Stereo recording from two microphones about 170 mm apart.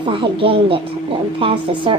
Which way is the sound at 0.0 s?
30° right (ahead or behind).